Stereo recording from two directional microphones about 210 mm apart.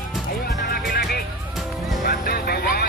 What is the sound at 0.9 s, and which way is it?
Music, 50° left (ahead or behind).